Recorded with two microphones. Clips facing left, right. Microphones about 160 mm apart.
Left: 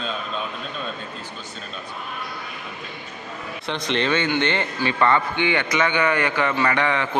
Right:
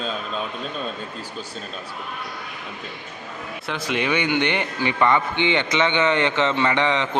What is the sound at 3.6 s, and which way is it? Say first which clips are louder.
A man's voice: left 1 dB; 5° right (ahead or behind).